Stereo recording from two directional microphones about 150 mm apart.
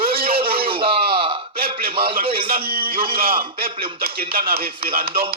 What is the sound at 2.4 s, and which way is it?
Speech, 80° right.